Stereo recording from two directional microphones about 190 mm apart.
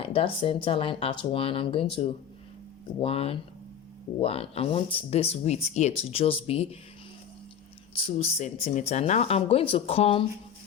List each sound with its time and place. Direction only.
0.0 s speech: 30° left (ahead or behind)
7.9 s speech: 30° left (ahead or behind)